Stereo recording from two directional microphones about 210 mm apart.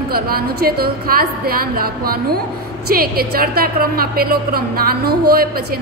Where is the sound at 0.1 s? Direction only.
45° right (ahead or behind).